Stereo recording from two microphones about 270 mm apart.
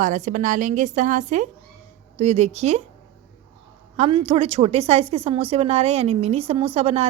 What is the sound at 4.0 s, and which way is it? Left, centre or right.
Speech, right.